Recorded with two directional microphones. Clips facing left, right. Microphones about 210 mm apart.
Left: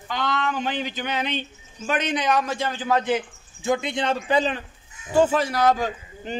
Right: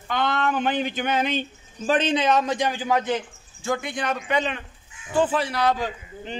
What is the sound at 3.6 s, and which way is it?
Speech, 20° left (ahead or behind).